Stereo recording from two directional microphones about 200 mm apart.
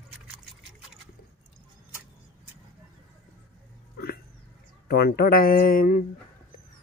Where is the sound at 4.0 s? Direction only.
45° left (ahead or behind).